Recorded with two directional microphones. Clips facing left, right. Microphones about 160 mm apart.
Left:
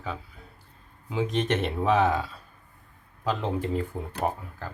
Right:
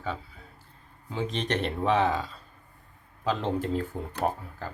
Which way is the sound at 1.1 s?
5° left (ahead or behind).